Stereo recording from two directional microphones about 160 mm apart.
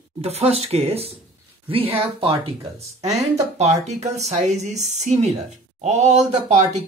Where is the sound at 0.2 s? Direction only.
40° right (ahead or behind).